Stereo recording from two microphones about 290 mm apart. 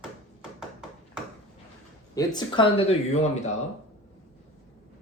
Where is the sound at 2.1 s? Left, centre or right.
Centre.